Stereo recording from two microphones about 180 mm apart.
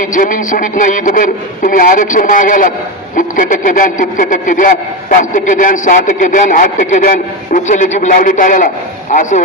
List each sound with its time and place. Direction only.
0.0 s speech: 45° left (ahead or behind)